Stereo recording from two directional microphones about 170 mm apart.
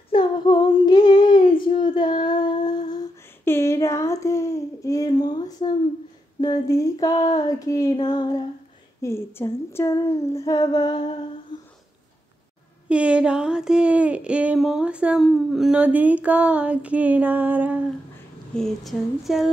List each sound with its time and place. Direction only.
0.1 s female singing: 25° left (ahead or behind)
3.4 s a sound: 15° left (ahead or behind)
9.0 s speech: 15° left (ahead or behind)
12.8 s speech: 5° right (ahead or behind)
18.5 s speech: centre (ahead or behind)